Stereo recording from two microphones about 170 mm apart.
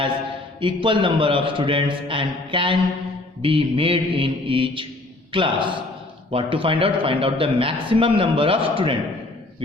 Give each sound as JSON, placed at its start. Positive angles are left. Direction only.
{"t": 0.6, "sound": "a man's voice", "side_deg": -30}